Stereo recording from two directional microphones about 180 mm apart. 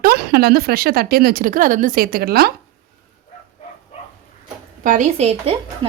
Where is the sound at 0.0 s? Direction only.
60° right (ahead or behind).